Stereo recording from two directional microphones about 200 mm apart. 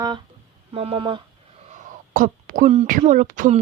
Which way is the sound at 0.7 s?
30° right (ahead or behind).